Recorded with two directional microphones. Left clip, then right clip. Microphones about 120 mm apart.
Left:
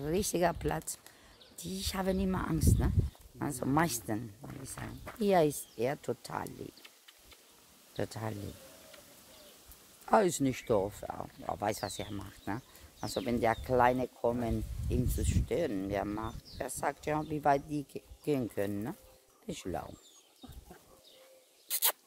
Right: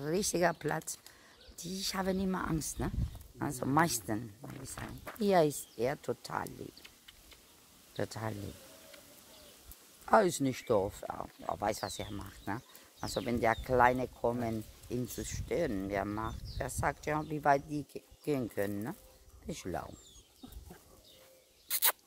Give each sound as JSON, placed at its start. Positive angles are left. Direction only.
{"t": 0.0, "sound": "speech", "side_deg": 15}
{"t": 7.9, "sound": "speech", "side_deg": 20}
{"t": 10.0, "sound": "speech", "side_deg": 20}
{"t": 21.6, "sound": "a sound", "side_deg": 15}